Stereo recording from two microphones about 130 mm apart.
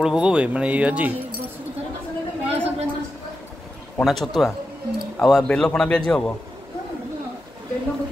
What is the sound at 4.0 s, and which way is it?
Speech, centre (ahead or behind).